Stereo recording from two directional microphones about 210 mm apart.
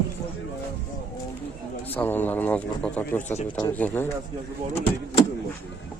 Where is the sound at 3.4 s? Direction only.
20° left (ahead or behind).